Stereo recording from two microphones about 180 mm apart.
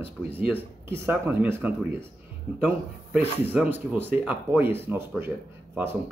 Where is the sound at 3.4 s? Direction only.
10° right (ahead or behind).